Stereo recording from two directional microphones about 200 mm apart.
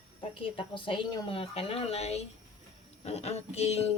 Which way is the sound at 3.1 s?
30° left (ahead or behind).